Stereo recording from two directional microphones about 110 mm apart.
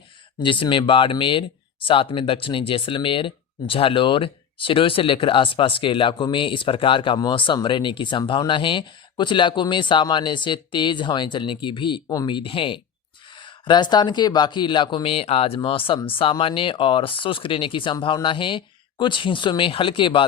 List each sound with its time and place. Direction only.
0.3 s speech: 50° left (ahead or behind)